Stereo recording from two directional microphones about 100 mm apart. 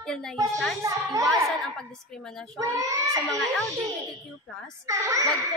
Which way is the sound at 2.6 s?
35° right (ahead or behind).